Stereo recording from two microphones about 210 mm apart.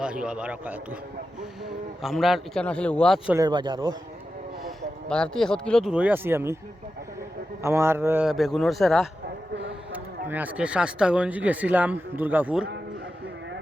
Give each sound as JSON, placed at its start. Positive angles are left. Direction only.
{"t": 0.0, "sound": "speech", "side_deg": -5}
{"t": 3.2, "sound": "speech", "side_deg": -15}
{"t": 4.6, "sound": "speech", "side_deg": 5}
{"t": 7.6, "sound": "speech", "side_deg": -10}